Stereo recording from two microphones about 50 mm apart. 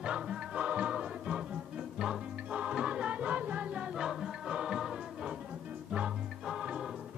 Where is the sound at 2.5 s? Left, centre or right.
Right.